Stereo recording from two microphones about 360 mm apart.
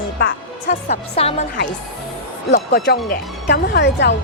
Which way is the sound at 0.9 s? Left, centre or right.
Centre.